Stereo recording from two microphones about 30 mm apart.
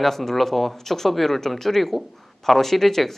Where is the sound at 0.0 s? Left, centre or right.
Centre.